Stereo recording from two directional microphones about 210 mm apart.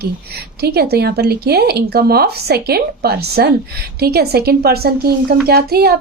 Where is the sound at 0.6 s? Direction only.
50° right (ahead or behind).